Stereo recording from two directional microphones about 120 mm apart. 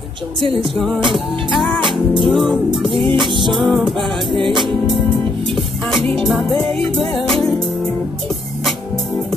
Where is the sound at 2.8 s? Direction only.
45° right (ahead or behind).